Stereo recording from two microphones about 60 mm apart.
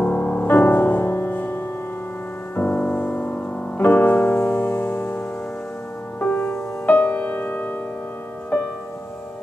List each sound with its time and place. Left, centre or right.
0.0 s music: left
6.1 s music: left